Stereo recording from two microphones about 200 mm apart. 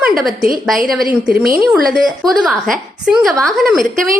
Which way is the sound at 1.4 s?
45° right (ahead or behind).